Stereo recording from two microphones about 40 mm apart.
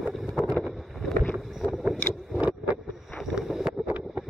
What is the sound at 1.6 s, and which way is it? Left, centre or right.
Boat, left.